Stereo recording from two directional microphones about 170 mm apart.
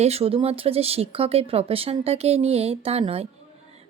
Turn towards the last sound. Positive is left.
turn(degrees=-35)  # may be behind; listen again after turning